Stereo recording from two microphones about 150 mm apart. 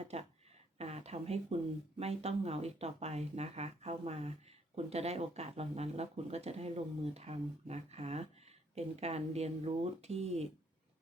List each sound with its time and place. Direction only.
0.1 s speech: 45° right (ahead or behind)